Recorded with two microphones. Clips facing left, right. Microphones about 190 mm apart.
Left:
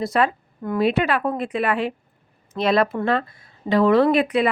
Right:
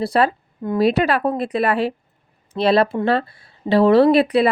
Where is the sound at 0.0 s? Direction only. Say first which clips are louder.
Right 3 dB; 35° right (ahead or behind).